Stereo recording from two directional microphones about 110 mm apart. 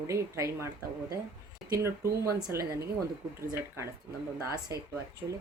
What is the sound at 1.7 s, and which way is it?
Speech, 25° right (ahead or behind).